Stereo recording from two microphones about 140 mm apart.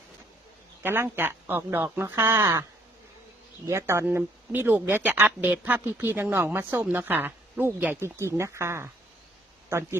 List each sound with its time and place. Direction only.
0.8 s speech: 15° right (ahead or behind)
3.7 s speech: 20° right (ahead or behind)